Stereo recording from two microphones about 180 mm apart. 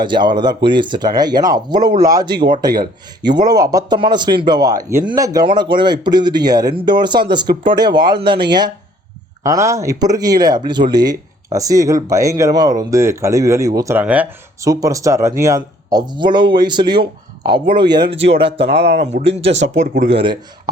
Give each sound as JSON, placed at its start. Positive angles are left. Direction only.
{"t": 0.0, "sound": "speech", "side_deg": -25}
{"t": 14.7, "sound": "speech", "side_deg": -20}
{"t": 18.6, "sound": "speech", "side_deg": -65}
{"t": 19.5, "sound": "speech", "side_deg": -85}
{"t": 19.8, "sound": "speech", "side_deg": -45}
{"t": 20.1, "sound": "speech", "side_deg": -25}